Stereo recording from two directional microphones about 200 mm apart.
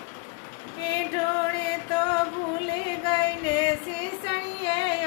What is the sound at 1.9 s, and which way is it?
Music, 25° left (ahead or behind).